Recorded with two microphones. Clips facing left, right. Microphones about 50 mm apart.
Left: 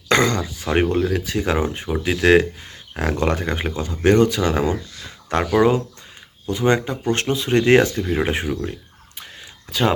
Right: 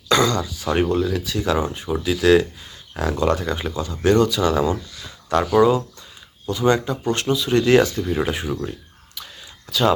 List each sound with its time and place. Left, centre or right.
0.1 s speech: left